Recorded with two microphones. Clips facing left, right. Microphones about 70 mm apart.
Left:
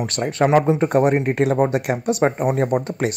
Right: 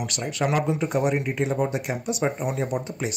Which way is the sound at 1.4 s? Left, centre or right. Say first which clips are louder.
Left 7 dB; left.